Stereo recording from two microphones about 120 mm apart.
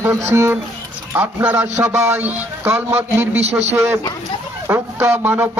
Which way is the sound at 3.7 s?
15° right (ahead or behind).